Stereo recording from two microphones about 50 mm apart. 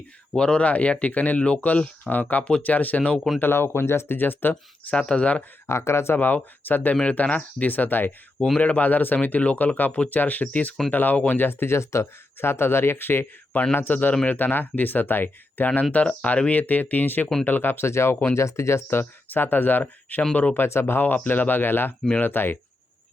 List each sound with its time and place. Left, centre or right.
0.3 s speech: centre
3.4 s speech: left
4.2 s speech: left
5.1 s speech: left
5.6 s speech: left
6.1 s speech: left
6.9 s speech: left
8.5 s speech: left
11.4 s speech: left
18.3 s speech: left
20.6 s speech: left